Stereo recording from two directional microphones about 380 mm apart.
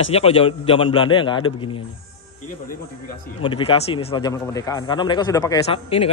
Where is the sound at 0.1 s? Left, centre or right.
Centre.